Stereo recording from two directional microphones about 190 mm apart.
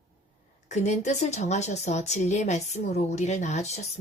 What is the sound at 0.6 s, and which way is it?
Speech, 40° left (ahead or behind).